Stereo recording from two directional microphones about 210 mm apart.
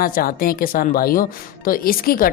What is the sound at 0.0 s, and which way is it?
Speech, 40° left (ahead or behind).